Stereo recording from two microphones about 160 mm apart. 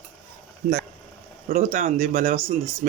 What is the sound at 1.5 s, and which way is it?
Speech, 60° right (ahead or behind).